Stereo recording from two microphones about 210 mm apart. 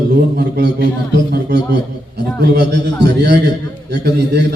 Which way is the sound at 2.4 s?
50° right (ahead or behind).